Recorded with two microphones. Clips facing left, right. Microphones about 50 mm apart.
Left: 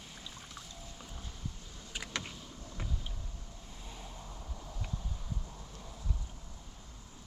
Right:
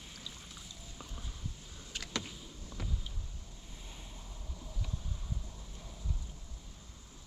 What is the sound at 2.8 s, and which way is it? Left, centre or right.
Vehicle, left.